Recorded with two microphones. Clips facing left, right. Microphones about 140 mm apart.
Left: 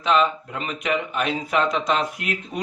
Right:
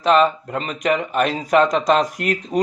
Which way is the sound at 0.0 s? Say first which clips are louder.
Right 5 dB; 40° right (ahead or behind).